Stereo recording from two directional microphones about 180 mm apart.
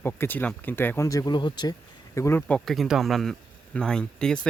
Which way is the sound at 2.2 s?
15° left (ahead or behind).